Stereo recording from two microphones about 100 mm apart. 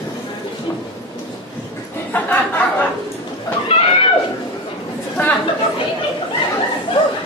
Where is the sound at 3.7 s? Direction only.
65° left (ahead or behind).